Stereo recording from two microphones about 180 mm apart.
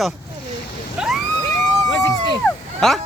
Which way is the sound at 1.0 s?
5° right (ahead or behind).